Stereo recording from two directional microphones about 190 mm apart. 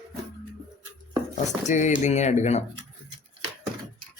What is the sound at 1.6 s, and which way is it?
Speech, 40° left (ahead or behind).